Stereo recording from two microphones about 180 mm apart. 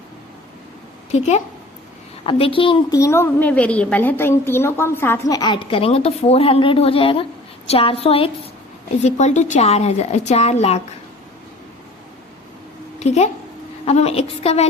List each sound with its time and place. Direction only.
1.1 s a woman's voice: 40° left (ahead or behind)
13.0 s a woman's voice: 40° left (ahead or behind)